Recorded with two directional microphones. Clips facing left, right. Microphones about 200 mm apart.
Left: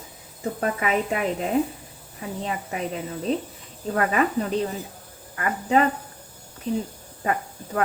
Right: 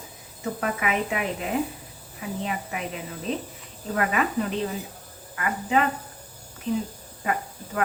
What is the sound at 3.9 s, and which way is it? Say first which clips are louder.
Speech: left 3 dB; 35° left (ahead or behind).